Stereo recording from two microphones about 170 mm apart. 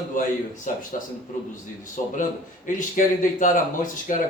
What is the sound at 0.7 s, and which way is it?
Speech, 50° left (ahead or behind).